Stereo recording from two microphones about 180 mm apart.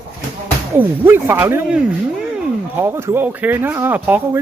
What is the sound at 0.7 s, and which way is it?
Speech, 10° right (ahead or behind).